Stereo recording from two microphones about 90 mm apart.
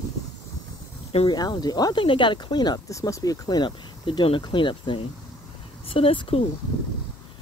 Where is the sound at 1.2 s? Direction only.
50° left (ahead or behind).